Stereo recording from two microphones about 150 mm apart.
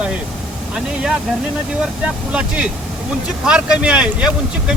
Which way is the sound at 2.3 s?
5° right (ahead or behind).